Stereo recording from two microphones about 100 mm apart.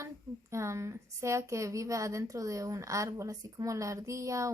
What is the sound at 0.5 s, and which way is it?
Speech, 30° right (ahead or behind).